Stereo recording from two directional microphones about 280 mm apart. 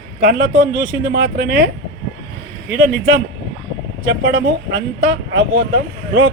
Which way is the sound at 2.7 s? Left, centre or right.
Right.